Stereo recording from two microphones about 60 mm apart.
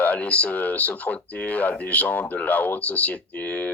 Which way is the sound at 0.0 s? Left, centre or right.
Left.